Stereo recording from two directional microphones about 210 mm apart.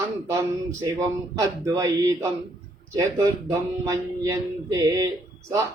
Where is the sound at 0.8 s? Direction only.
15° right (ahead or behind).